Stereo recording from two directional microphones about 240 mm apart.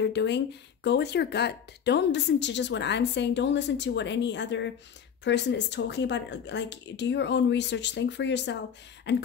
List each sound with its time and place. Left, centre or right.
0.0 s speech: left